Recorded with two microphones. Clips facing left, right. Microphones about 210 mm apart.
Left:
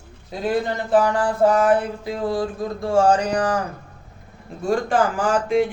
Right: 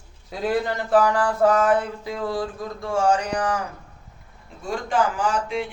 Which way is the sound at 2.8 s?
35° left (ahead or behind).